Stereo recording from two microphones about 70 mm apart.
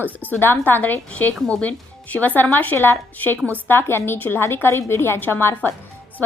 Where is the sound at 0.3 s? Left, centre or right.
Left.